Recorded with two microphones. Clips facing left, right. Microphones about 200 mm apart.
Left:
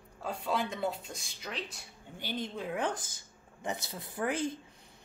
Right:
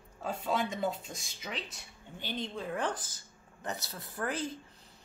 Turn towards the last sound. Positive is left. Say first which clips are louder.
# left 3 dB
turn(degrees=20)  # may be behind; listen again after turning